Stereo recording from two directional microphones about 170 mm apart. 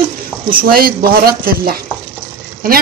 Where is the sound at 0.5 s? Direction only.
60° right (ahead or behind).